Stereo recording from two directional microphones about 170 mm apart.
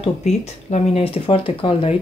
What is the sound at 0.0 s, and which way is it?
Speech, 40° left (ahead or behind).